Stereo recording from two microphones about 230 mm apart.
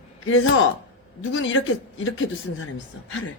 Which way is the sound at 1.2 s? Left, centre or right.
Left.